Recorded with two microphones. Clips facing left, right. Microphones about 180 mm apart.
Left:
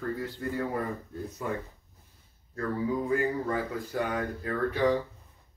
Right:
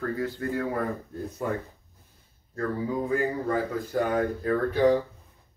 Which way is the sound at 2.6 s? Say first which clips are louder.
Right 1 dB; 45° right (ahead or behind).